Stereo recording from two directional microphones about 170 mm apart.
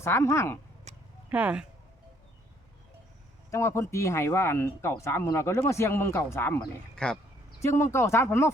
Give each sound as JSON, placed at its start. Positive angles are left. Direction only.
{"t": 0.0, "sound": "speech", "side_deg": 15}
{"t": 0.9, "sound": "a sound", "side_deg": -40}
{"t": 1.3, "sound": "speech", "side_deg": -5}
{"t": 3.5, "sound": "speech", "side_deg": 15}
{"t": 7.6, "sound": "speech", "side_deg": 15}